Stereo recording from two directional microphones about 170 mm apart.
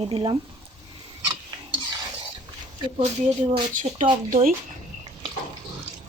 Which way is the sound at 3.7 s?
50° right (ahead or behind).